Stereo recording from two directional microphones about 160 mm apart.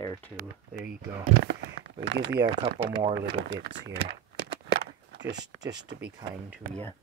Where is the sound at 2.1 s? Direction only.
90° right.